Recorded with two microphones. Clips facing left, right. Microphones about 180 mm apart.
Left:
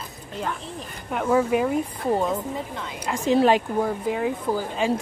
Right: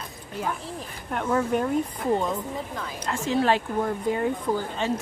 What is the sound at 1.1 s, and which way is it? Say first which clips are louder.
Speech: left 3 dB; 5° left (ahead or behind).